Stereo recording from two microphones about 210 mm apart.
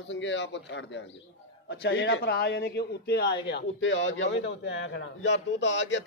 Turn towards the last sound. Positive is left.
turn(degrees=60)  # may be behind; listen again after turning